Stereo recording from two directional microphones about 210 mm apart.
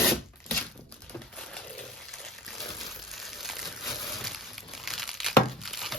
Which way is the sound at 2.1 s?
Centre (ahead or behind).